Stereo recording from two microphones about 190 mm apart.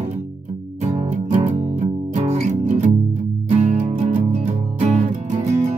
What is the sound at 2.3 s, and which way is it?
Music, 35° right (ahead or behind).